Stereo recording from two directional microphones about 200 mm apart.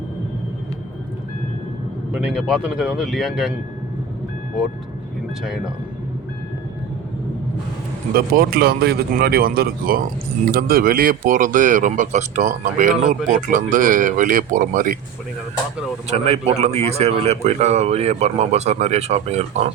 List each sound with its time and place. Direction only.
2.1 s speech: 5° right (ahead or behind)
8.1 s a man's voice: 45° right (ahead or behind)
16.0 s a man's voice: 30° right (ahead or behind)